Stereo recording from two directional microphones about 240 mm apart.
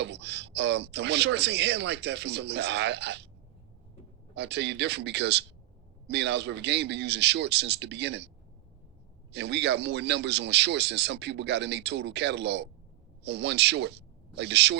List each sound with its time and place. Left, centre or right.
0.0 s a man's voice: right
4.4 s a man's voice: right
9.3 s a man's voice: right